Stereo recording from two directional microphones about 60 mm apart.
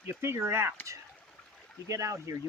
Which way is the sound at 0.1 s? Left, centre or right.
Right.